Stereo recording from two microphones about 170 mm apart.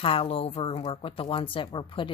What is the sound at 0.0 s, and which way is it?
Speech, 35° left (ahead or behind).